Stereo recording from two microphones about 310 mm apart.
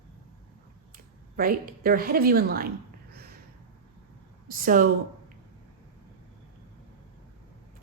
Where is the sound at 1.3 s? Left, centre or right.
Right.